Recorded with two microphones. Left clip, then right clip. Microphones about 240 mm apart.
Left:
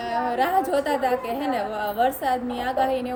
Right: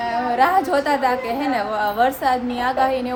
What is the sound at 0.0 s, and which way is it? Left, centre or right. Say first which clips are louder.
A woman's voice: right 5 dB; centre.